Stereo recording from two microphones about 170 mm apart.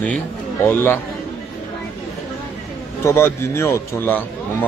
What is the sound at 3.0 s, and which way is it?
A man's voice, 15° left (ahead or behind).